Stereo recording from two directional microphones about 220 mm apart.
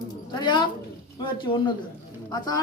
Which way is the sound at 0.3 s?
20° left (ahead or behind).